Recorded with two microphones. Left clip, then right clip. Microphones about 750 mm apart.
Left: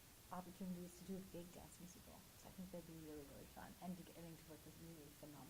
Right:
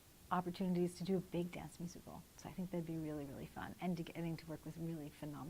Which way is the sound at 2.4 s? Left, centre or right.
Right.